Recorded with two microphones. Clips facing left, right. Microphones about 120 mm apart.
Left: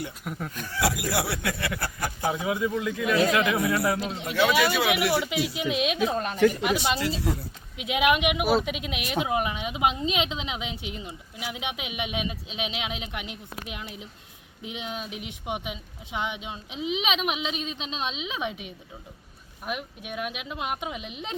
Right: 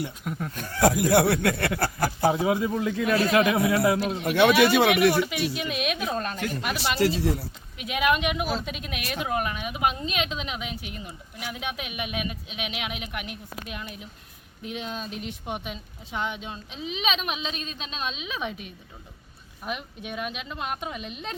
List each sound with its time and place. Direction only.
0.3 s speech: centre (ahead or behind)
0.5 s speech: 40° right (ahead or behind)
2.0 s speech: 30° right (ahead or behind)
4.2 s speech: 65° right (ahead or behind)
4.9 s a woman's voice: 25° left (ahead or behind)
19.6 s speech: 5° left (ahead or behind)